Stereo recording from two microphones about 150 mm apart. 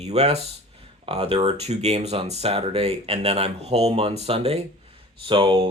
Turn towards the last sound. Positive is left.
turn(degrees=-35)  # may be behind; listen again after turning